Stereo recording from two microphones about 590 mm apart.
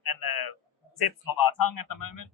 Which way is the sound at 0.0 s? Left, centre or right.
Left.